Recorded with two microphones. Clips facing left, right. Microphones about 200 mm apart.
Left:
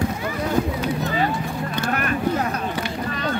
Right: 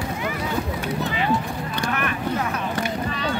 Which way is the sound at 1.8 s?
40° left (ahead or behind).